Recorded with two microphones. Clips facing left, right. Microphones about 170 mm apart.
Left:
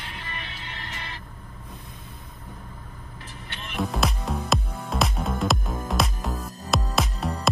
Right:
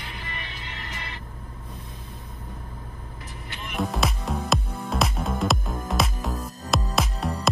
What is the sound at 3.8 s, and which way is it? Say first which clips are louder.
Music: even; centre (ahead or behind).